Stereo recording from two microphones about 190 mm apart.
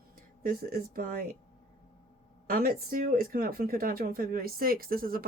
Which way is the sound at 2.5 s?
50° right (ahead or behind).